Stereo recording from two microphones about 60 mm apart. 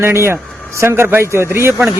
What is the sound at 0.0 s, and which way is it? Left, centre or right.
Speech, right.